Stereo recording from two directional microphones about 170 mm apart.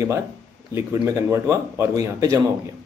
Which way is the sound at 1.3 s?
15° right (ahead or behind).